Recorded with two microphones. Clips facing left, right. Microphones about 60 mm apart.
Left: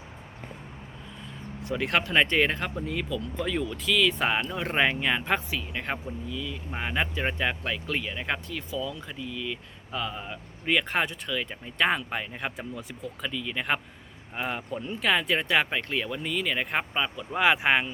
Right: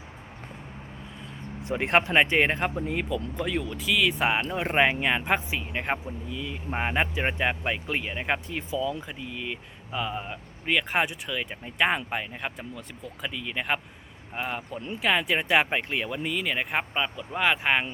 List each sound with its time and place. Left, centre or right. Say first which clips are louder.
1.6 s speech: right 3 dB; right
3.3 s speech: even; centre
10.7 s speech: right 1 dB; centre
15.4 s speech: right 2 dB; centre